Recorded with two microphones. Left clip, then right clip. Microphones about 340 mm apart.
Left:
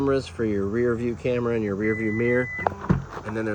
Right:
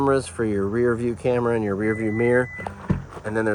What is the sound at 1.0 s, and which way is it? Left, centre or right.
Speech, centre.